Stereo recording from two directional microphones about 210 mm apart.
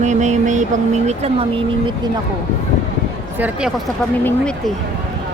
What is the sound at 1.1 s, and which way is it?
Speech, 30° right (ahead or behind).